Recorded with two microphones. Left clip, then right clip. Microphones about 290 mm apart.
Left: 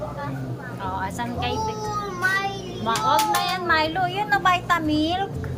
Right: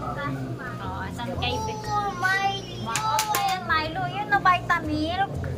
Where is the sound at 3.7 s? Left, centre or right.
Centre.